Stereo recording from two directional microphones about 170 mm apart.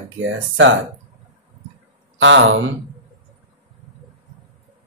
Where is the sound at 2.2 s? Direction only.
90° right.